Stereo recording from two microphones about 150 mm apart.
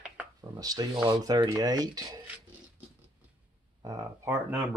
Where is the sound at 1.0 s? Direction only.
25° right (ahead or behind).